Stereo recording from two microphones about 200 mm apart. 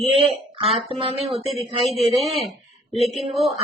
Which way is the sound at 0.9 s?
30° right (ahead or behind).